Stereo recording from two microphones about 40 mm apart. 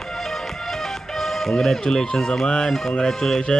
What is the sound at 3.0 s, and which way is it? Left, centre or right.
Speech, centre.